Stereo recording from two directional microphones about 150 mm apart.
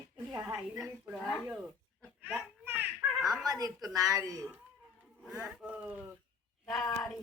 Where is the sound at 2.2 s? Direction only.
15° right (ahead or behind).